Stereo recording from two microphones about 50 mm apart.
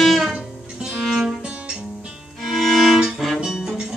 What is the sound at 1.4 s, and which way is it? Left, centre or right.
Guitar, right.